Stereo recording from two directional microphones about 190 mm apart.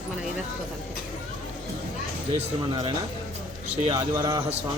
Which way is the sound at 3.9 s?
20° right (ahead or behind).